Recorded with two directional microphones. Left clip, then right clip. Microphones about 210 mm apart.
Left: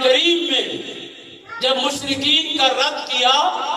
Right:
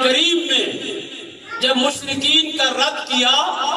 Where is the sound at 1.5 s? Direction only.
20° left (ahead or behind).